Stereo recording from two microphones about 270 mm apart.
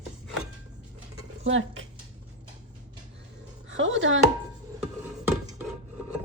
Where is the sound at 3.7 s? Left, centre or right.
Right.